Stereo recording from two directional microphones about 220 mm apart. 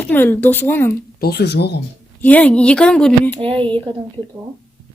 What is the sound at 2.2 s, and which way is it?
A woman's voice, 5° left (ahead or behind).